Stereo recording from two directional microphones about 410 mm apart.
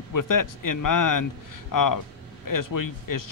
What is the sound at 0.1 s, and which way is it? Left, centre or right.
Speech, left.